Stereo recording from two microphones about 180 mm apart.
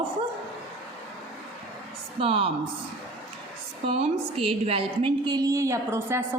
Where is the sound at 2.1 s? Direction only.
30° right (ahead or behind).